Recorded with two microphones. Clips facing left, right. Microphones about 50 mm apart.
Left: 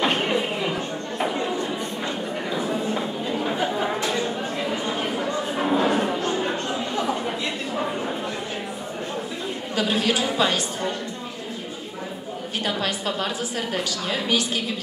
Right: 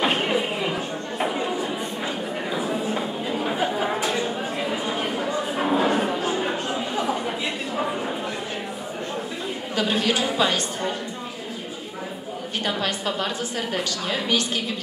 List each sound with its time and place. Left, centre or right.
0.0 s a sound: centre
2.5 s chatter: centre
9.8 s a woman's voice: centre
12.6 s a woman's voice: centre